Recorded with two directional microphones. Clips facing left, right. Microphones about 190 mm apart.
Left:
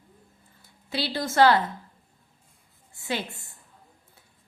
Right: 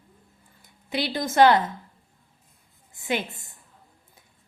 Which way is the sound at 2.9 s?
20° right (ahead or behind).